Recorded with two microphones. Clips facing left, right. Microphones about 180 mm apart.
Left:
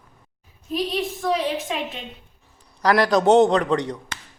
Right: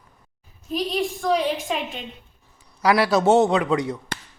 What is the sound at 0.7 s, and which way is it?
A woman's voice, centre (ahead or behind).